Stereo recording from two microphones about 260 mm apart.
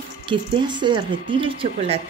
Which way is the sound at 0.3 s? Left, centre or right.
Centre.